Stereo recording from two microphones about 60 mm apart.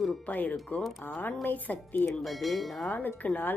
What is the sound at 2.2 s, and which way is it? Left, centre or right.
Speech, centre.